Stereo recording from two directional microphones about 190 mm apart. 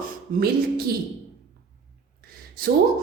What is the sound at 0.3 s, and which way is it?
Speech, 50° right (ahead or behind).